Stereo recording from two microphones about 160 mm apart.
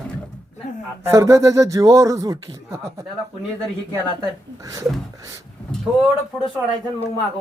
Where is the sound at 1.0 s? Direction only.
20° right (ahead or behind).